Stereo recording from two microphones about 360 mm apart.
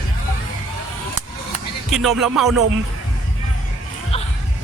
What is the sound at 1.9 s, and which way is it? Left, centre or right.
Speech, centre.